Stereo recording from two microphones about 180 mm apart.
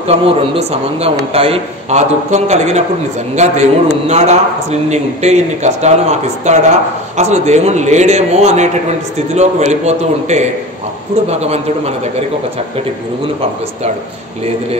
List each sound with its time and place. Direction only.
0.0 s a man's voice: 35° right (ahead or behind)